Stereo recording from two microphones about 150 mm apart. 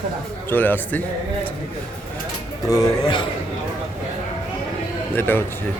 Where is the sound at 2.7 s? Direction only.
25° left (ahead or behind).